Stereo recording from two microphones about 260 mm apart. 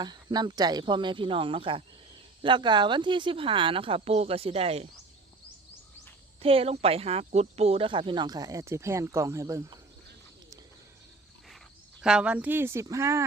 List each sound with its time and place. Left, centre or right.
0.0 s speech: centre
6.4 s speech: right
11.9 s speech: centre